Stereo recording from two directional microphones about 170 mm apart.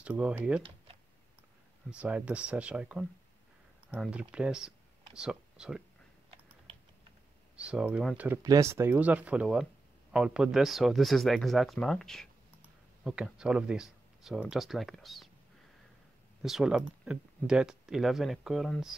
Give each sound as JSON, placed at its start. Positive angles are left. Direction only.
{"t": 0.0, "sound": "speech", "side_deg": -5}
{"t": 0.6, "sound": "speech", "side_deg": -30}
{"t": 1.9, "sound": "speech", "side_deg": -5}
{"t": 7.5, "sound": "speech", "side_deg": -5}
{"t": 8.3, "sound": "speech", "side_deg": -20}
{"t": 16.4, "sound": "speech", "side_deg": -5}